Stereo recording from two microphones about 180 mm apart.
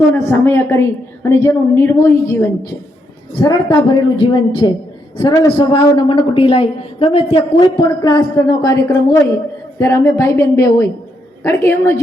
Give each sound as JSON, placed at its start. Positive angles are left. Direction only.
{"t": 0.1, "sound": "a woman's voice", "side_deg": 10}
{"t": 3.3, "sound": "a woman's voice", "side_deg": 25}